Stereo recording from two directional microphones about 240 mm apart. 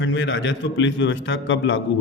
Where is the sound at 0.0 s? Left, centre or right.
Left.